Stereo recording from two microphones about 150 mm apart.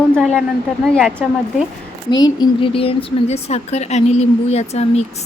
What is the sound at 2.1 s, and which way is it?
A woman's voice, 25° left (ahead or behind).